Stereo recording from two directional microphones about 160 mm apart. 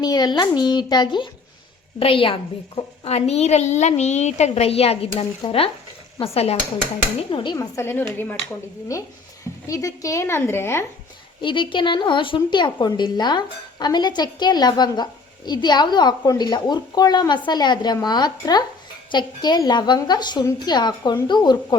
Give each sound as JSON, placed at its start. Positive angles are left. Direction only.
{"t": 0.0, "sound": "a woman's voice", "side_deg": 25}
{"t": 11.3, "sound": "a woman's voice", "side_deg": 30}